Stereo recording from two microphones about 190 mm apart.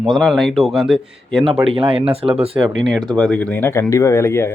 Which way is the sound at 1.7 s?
30° right (ahead or behind).